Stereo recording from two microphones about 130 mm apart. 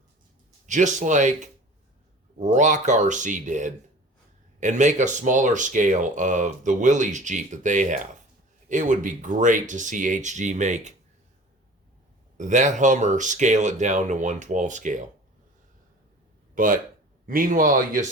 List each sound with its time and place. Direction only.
0.7 s speech: 70° right (ahead or behind)
12.4 s speech: 70° right (ahead or behind)
16.6 s speech: 90° right